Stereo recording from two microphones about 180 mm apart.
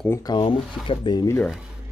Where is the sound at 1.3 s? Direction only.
Centre (ahead or behind).